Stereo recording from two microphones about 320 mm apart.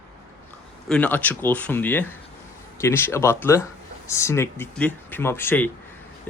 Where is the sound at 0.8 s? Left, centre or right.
Centre.